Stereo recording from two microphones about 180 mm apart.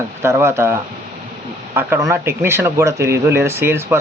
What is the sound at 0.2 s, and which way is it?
Speech, 15° right (ahead or behind).